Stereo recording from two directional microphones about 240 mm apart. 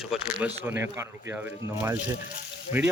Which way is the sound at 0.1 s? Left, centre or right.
Centre.